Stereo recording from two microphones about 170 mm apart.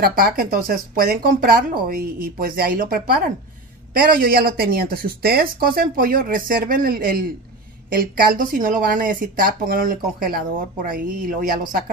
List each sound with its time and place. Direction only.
0.0 s speech: 60° right (ahead or behind)